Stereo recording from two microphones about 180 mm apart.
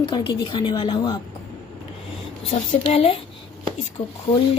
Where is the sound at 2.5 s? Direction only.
35° left (ahead or behind).